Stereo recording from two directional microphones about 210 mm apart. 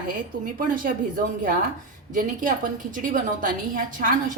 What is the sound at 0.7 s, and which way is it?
Speech, 40° right (ahead or behind).